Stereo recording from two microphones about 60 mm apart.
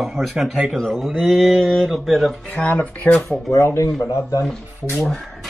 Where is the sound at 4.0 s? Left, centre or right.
Left.